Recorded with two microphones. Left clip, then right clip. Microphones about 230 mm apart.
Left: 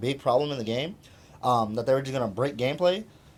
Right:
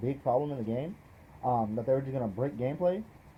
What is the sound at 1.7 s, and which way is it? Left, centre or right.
Speech, left.